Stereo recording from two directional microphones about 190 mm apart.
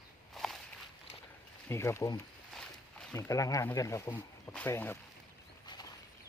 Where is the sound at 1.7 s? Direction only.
15° left (ahead or behind).